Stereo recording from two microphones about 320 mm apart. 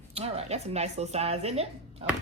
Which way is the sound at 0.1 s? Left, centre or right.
Centre.